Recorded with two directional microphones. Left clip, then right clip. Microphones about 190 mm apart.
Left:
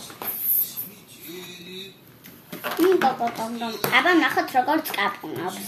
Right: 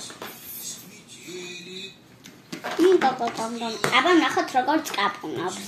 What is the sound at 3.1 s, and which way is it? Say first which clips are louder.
Speech: left 1 dB; centre (ahead or behind).